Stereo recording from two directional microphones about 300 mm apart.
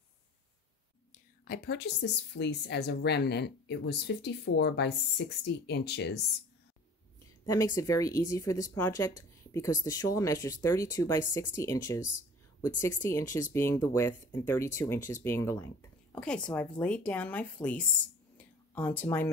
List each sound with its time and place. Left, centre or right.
1.1 s a woman's voice: left
7.4 s speech: centre
18.4 s a sound: centre